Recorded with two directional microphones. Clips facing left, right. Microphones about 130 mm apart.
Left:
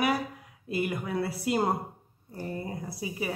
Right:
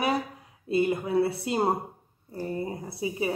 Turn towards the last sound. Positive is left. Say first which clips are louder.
# right 4 dB
turn(degrees=-25)  # may be behind; listen again after turning